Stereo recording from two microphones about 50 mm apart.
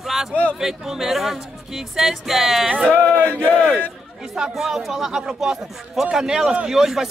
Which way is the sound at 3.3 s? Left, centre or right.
Left.